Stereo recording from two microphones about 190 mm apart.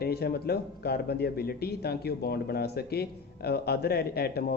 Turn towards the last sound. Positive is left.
turn(degrees=55)  # may be behind; listen again after turning